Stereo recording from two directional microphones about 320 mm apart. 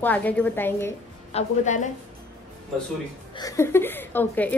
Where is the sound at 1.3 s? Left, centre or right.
Left.